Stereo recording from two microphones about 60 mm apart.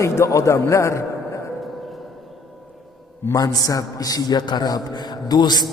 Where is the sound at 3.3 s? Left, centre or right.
Left.